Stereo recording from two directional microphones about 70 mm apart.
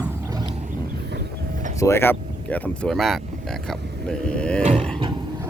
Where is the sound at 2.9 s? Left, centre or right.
Centre.